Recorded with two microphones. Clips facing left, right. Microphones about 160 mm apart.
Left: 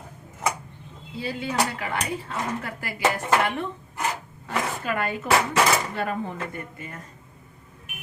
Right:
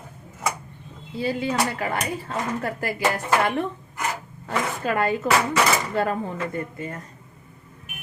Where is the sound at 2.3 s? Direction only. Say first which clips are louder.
Right 3 dB; 45° right (ahead or behind).